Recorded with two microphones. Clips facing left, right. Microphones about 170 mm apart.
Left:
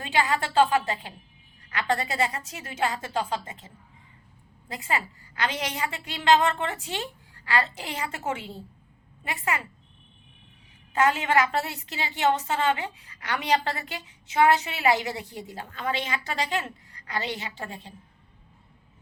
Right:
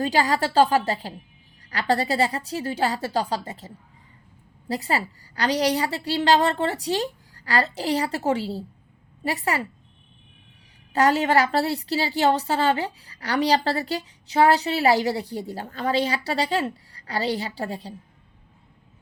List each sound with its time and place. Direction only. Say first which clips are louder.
0.0 s a woman's voice: right 4 dB; 40° right (ahead or behind)
4.7 s a woman's voice: right 5 dB; 35° right (ahead or behind)
10.9 s a woman's voice: right 3 dB; 35° right (ahead or behind)